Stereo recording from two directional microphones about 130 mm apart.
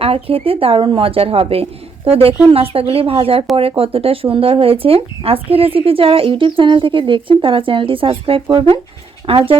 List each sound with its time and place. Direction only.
0.0 s speech: 45° right (ahead or behind)